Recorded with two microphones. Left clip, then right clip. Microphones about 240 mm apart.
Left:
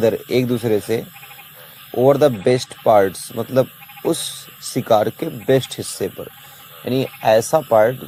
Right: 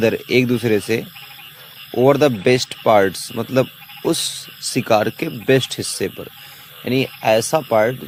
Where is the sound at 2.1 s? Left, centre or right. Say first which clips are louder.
Even; right.